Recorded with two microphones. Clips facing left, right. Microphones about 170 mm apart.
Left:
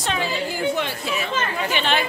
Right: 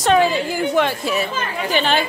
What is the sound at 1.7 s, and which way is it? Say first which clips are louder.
Speech: right 5 dB; 40° right (ahead or behind).